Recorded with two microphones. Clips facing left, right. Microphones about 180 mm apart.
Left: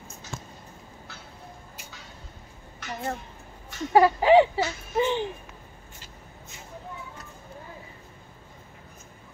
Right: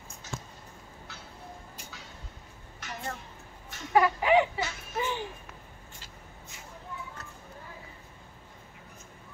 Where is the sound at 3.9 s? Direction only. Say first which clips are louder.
Left 6 dB; 30° left (ahead or behind).